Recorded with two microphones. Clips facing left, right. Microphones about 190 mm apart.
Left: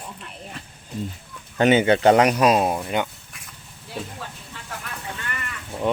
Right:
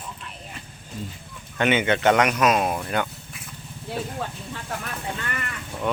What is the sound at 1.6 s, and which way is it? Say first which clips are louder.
Speech: left 5 dB; 35° left (ahead or behind).